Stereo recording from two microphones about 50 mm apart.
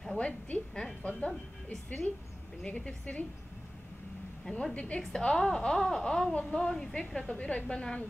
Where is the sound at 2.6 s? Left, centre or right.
Left.